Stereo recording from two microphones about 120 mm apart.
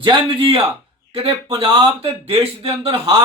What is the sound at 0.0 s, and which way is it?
Speech, 45° right (ahead or behind).